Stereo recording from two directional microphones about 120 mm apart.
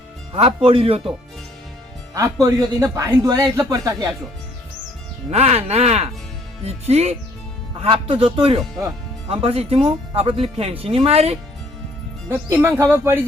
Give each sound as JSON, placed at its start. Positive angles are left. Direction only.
{"t": 0.3, "sound": "speech", "side_deg": -50}
{"t": 2.1, "sound": "speech", "side_deg": -25}
{"t": 5.3, "sound": "speech", "side_deg": -60}
{"t": 7.8, "sound": "speech", "side_deg": -50}
{"t": 12.5, "sound": "speech", "side_deg": -20}